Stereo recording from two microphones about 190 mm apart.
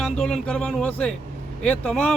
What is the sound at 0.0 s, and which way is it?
Speech, centre (ahead or behind).